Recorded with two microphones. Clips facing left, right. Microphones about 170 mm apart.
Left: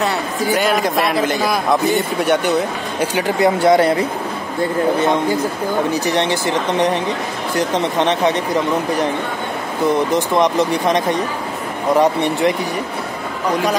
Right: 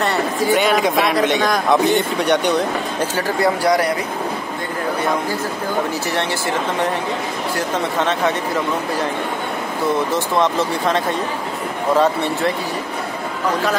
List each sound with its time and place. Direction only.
0.0 s a man's voice: centre (ahead or behind)
3.0 s speech: 20° left (ahead or behind)
5.9 s speech: 20° left (ahead or behind)
10.1 s speech: 15° left (ahead or behind)